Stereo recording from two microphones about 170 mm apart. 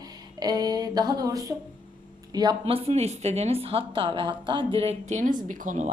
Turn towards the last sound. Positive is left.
turn(degrees=-50)  # may be behind; listen again after turning